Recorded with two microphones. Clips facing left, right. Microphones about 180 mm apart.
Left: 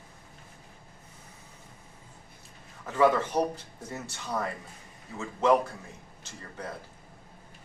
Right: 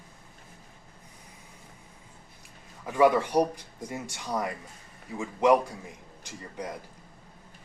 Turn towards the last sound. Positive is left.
turn(degrees=-15)  # may be behind; listen again after turning